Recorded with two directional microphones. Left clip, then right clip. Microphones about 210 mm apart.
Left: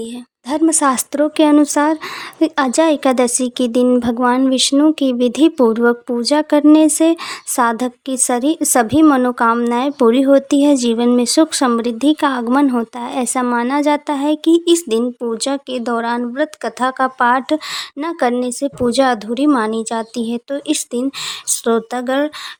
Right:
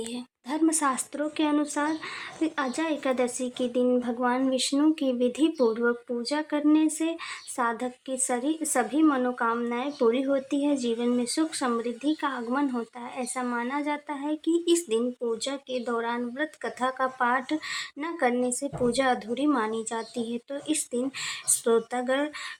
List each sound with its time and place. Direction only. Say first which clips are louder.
0.4 s a woman's voice: left 11 dB; 40° left (ahead or behind)